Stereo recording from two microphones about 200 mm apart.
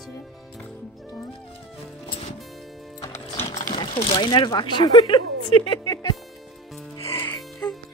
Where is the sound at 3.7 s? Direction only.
25° left (ahead or behind).